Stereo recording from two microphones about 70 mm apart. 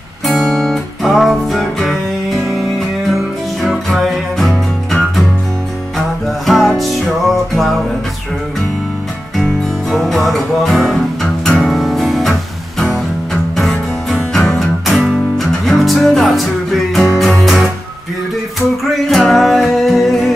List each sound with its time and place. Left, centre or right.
0.4 s music: centre
9.4 s music: centre
19.0 s music: centre